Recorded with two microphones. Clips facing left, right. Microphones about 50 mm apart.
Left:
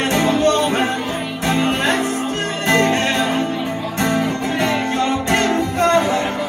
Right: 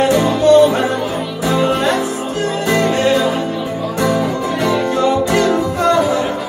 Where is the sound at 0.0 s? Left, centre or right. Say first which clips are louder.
Right 3 dB; left.